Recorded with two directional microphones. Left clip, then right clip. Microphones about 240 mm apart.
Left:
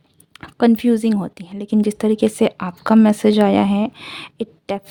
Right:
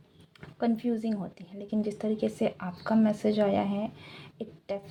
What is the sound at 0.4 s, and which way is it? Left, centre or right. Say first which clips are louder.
Speech: left 14 dB; left.